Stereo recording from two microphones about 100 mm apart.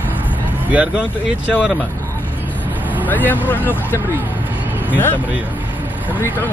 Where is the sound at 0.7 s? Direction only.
15° right (ahead or behind).